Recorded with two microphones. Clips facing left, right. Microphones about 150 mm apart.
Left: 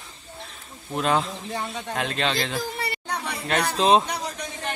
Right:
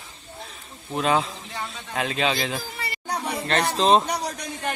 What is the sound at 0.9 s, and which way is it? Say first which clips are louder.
Speech: right 1 dB; centre (ahead or behind).